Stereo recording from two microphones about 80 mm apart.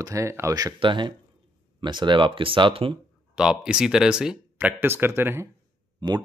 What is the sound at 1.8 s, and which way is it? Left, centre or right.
Speech, right.